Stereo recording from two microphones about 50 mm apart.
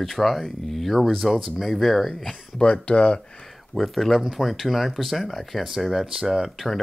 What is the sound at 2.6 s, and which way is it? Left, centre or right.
Speech, left.